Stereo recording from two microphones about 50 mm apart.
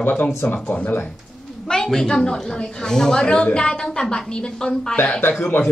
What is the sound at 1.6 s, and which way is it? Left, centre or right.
Speech, centre.